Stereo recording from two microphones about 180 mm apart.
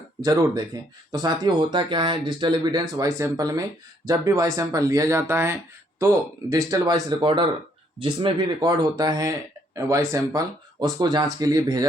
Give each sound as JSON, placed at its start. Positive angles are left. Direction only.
{"t": 0.2, "sound": "speech", "side_deg": -20}